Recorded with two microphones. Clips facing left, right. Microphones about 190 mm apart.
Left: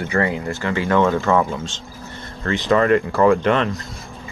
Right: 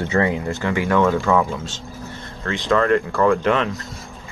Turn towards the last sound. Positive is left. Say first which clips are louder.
# left 2 dB
turn(degrees=0)  # may be behind; listen again after turning